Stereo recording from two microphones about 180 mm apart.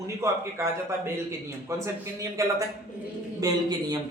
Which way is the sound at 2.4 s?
15° right (ahead or behind).